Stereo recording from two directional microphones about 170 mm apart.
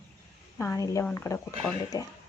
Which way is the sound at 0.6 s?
15° left (ahead or behind).